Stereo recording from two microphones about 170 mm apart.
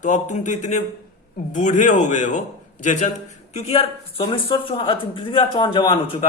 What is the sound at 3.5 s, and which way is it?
A man's voice, 35° left (ahead or behind).